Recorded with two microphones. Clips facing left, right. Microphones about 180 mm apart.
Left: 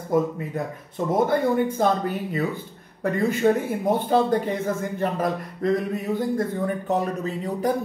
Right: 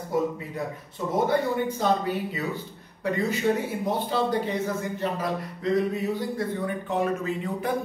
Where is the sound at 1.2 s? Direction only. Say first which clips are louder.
Left 3 dB; 50° left (ahead or behind).